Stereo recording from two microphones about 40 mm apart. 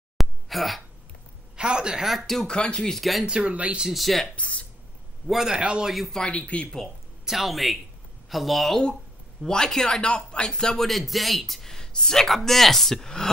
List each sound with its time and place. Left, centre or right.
0.2 s a sound: centre
1.6 s speech: right
2.0 s speech: centre
2.6 s speech: left
2.9 s speech: centre
3.3 s speech: right
3.8 s speech: centre
4.4 s speech: left
5.2 s a man's voice: centre
5.5 s speech: right
5.9 s speech: centre
6.3 s speech: left
7.2 s speech: centre
9.4 s speech: centre